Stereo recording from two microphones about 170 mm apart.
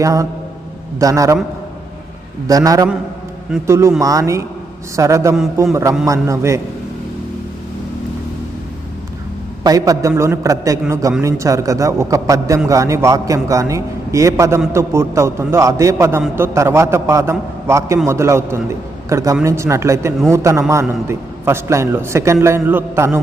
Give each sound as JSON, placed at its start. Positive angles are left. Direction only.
{"t": 0.0, "sound": "a man's voice", "side_deg": -20}
{"t": 2.5, "sound": "a man's voice", "side_deg": -20}
{"t": 9.6, "sound": "a man's voice", "side_deg": -20}